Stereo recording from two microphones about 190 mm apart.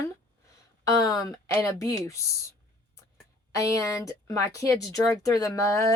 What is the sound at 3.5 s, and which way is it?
Speech, 15° left (ahead or behind).